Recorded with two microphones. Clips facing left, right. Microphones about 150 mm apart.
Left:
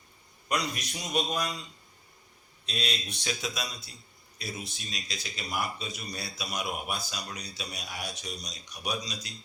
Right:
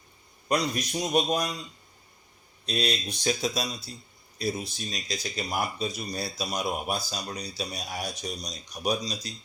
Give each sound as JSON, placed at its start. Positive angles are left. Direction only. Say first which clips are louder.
{"t": 0.4, "sound": "speech", "louder": "right 5 dB", "side_deg": -35}
{"t": 2.6, "sound": "speech", "louder": "right 6 dB", "side_deg": -40}